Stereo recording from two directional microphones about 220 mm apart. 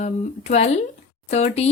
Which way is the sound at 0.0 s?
30° left (ahead or behind).